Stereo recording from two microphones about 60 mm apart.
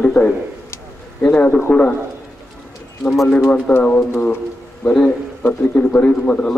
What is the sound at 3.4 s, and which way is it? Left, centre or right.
Speech, left.